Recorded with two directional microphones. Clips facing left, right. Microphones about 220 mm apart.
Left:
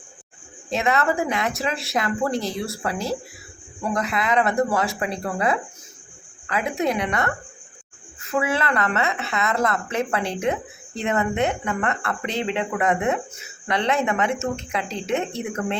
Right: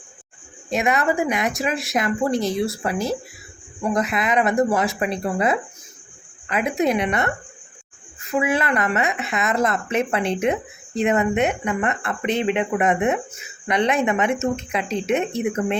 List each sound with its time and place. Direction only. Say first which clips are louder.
0.7 s speech: right 1 dB; 15° right (ahead or behind)
8.3 s speech: right 2 dB; 15° right (ahead or behind)